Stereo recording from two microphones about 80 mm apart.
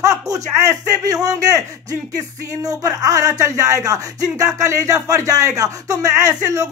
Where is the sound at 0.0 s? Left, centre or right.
Right.